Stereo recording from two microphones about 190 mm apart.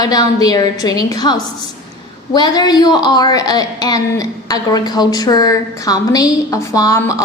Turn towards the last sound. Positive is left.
turn(degrees=15)  # may be behind; listen again after turning